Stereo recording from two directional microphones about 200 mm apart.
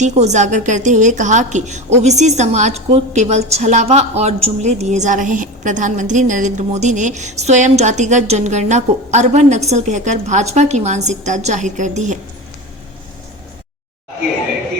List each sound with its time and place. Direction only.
0.0 s a woman's voice: 35° right (ahead or behind)